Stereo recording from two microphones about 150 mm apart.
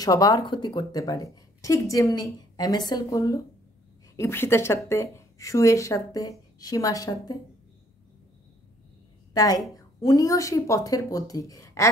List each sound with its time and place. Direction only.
0.0 s speech: 25° left (ahead or behind)
9.3 s speech: 25° left (ahead or behind)